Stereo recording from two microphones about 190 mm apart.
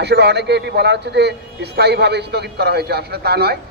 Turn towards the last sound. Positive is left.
turn(degrees=-55)  # may be behind; listen again after turning